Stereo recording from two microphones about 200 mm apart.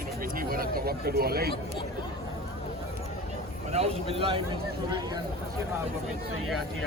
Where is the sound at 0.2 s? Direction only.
45° right (ahead or behind).